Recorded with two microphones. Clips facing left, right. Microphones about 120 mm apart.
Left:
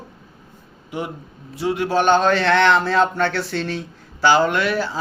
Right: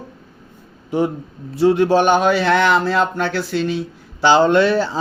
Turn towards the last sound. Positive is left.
turn(degrees=-30)  # may be behind; listen again after turning